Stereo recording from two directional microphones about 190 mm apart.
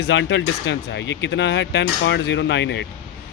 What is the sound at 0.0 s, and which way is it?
Speech, 70° left (ahead or behind).